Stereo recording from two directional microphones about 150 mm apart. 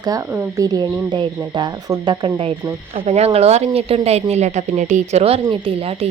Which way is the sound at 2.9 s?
45° right (ahead or behind).